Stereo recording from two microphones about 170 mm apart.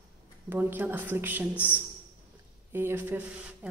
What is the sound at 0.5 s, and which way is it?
Speech, 10° right (ahead or behind).